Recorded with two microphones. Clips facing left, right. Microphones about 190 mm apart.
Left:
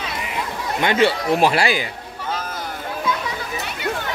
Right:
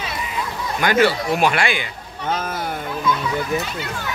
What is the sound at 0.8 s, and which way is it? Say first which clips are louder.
A man's voice: right 1 dB; 25° left (ahead or behind).